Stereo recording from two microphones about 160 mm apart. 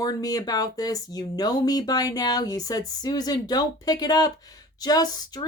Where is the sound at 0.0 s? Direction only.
25° left (ahead or behind).